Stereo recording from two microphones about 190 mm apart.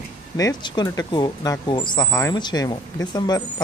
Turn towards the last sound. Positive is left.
turn(degrees=20)  # may be behind; listen again after turning